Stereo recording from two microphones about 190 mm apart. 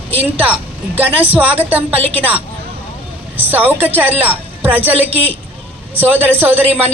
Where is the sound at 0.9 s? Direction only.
10° right (ahead or behind).